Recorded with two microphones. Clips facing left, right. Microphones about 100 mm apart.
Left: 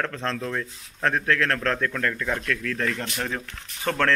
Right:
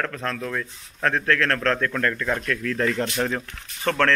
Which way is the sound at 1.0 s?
15° left (ahead or behind).